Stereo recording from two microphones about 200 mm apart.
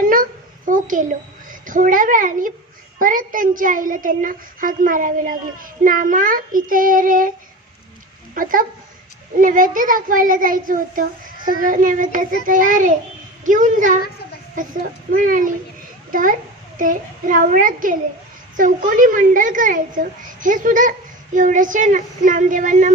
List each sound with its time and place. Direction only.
0.0 s a sound: 45° right (ahead or behind)
3.0 s a woman's voice: 45° right (ahead or behind)
8.4 s a woman's voice: 45° right (ahead or behind)